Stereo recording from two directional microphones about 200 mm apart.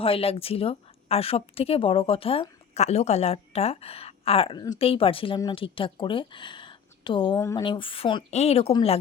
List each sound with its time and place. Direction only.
0.0 s a woman's voice: 30° left (ahead or behind)
7.6 s a woman's voice: 25° left (ahead or behind)